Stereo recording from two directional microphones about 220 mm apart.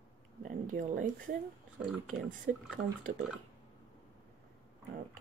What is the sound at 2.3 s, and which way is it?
Speech, 35° right (ahead or behind).